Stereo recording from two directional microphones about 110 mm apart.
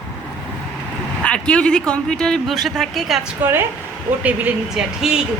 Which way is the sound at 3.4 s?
15° right (ahead or behind).